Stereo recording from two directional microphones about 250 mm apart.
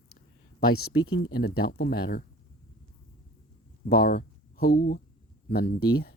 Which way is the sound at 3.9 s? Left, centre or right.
Left.